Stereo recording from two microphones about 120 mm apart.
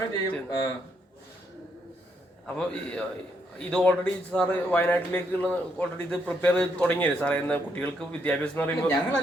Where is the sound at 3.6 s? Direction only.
10° left (ahead or behind).